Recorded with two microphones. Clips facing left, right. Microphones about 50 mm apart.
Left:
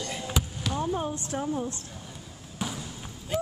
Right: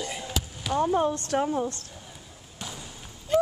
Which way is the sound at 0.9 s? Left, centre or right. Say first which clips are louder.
Right 6 dB; right.